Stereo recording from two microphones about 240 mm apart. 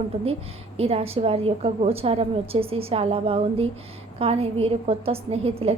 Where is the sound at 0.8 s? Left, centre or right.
Right.